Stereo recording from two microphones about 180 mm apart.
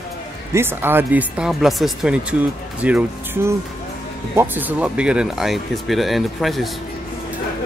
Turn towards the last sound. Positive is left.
turn(degrees=0)  # may be behind; listen again after turning